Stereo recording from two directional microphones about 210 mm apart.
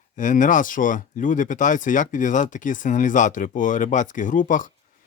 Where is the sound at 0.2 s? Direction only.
40° left (ahead or behind).